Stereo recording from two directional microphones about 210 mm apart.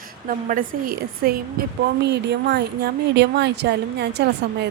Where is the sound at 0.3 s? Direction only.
40° right (ahead or behind).